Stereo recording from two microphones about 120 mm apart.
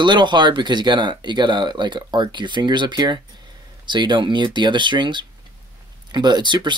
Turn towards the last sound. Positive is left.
turn(degrees=-40)  # may be behind; listen again after turning